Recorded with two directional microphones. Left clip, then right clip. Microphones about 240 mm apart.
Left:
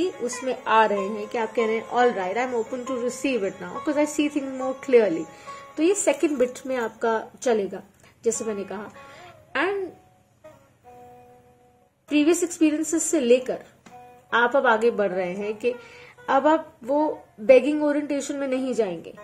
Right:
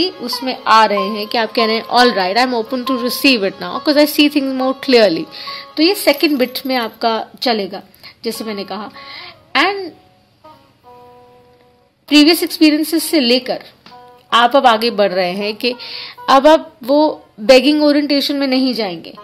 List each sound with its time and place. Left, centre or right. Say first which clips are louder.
0.7 s a woman's voice: right 9 dB; right
1.4 s a woman's voice: right 8 dB; right
12.1 s a woman's voice: right 10 dB; right